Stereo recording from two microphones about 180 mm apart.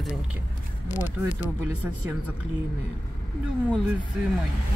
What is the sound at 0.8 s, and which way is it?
Speech, 45° left (ahead or behind).